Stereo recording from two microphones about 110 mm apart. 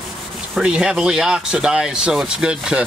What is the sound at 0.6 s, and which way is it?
Speech, 5° right (ahead or behind).